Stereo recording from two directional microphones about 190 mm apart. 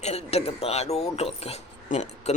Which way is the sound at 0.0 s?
35° left (ahead or behind).